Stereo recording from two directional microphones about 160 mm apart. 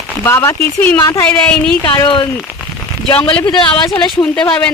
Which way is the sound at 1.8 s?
30° left (ahead or behind).